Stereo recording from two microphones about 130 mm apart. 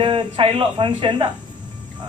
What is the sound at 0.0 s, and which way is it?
Speech, 40° right (ahead or behind).